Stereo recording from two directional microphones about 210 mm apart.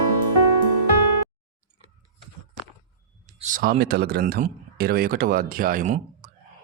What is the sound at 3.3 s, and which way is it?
Speech, 40° right (ahead or behind).